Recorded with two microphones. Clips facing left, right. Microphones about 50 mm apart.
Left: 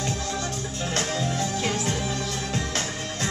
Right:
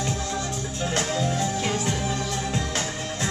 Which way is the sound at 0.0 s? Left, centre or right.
Right.